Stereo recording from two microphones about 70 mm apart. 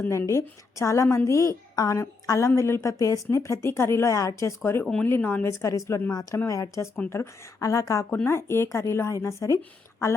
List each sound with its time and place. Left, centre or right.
0.0 s speech: left
5.5 s speech: left
8.1 s speech: left